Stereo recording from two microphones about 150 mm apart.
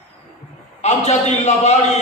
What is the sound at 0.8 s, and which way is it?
Speech, 45° left (ahead or behind).